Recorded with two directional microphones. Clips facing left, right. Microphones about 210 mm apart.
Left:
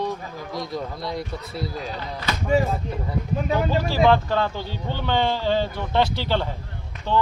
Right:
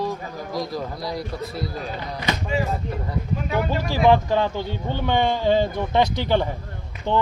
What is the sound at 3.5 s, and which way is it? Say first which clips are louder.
Speech: left 1 dB; 15° right (ahead or behind).